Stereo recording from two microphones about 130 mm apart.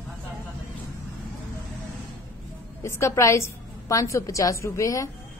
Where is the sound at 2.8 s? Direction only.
20° left (ahead or behind).